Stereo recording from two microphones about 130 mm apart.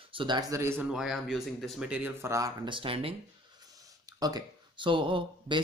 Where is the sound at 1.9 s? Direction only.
15° right (ahead or behind).